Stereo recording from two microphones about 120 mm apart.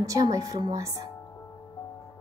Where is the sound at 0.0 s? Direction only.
30° right (ahead or behind).